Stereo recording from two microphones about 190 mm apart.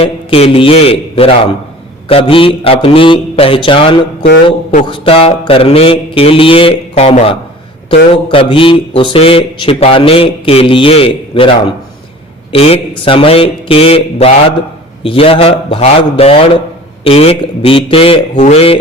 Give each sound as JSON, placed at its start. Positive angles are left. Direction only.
{"t": 0.0, "sound": "speech", "side_deg": 30}